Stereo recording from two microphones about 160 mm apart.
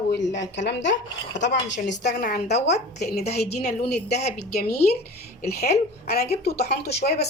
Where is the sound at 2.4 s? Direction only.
45° left (ahead or behind).